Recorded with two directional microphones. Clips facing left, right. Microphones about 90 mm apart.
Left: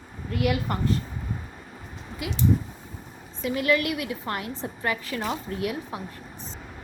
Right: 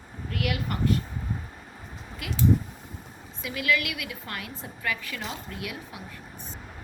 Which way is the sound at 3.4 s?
35° left (ahead or behind).